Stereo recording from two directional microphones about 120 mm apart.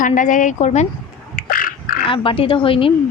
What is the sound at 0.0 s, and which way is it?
Speech, 90° left.